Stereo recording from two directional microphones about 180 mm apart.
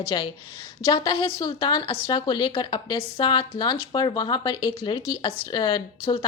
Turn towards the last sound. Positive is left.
turn(degrees=25)  # may be behind; listen again after turning